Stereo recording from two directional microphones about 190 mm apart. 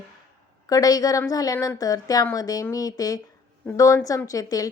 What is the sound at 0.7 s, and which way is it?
A woman's voice, 20° left (ahead or behind).